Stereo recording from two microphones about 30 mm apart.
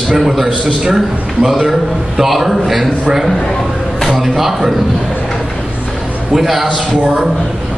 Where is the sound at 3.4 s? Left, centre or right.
Left.